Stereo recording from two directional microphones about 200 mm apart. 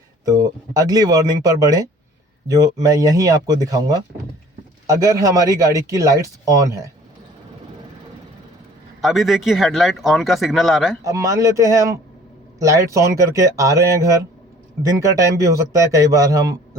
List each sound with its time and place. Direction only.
0.3 s speech: 15° right (ahead or behind)
9.0 s speech: centre (ahead or behind)
11.0 s speech: 15° right (ahead or behind)